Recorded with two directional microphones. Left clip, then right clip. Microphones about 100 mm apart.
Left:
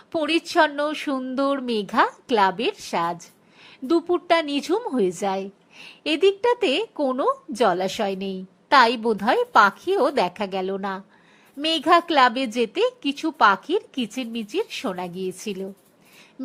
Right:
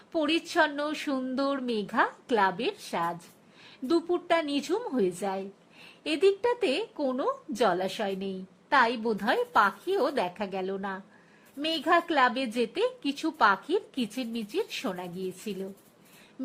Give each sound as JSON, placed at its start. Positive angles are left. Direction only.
{"t": 0.1, "sound": "a woman's voice", "side_deg": 40}